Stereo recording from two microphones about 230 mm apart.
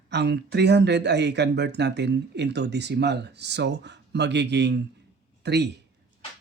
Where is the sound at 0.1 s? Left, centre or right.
Right.